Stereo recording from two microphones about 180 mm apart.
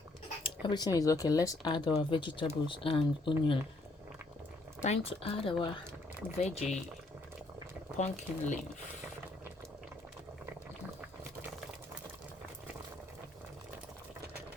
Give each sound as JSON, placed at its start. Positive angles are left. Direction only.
{"t": 0.4, "sound": "speech", "side_deg": 25}
{"t": 4.8, "sound": "speech", "side_deg": 35}
{"t": 7.9, "sound": "speech", "side_deg": 40}